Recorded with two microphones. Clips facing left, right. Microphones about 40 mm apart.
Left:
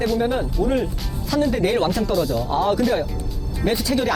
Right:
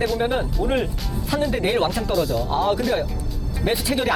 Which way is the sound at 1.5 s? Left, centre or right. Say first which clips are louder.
Left 1 dB; centre.